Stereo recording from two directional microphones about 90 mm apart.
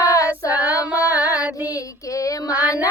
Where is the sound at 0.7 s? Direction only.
15° right (ahead or behind).